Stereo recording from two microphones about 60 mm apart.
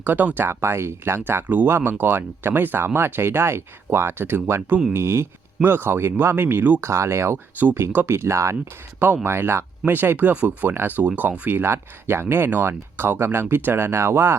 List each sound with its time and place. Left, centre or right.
0.0 s speech: right
0.4 s speech: right
5.6 s speech: right
6.8 s speech: right
9.9 s speech: right